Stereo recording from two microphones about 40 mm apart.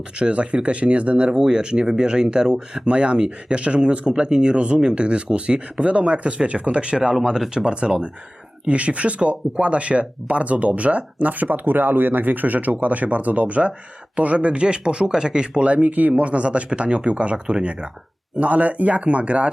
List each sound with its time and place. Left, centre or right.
0.2 s speech: right
1.3 s speech: centre